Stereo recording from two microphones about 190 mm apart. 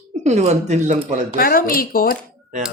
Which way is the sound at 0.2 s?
35° right (ahead or behind).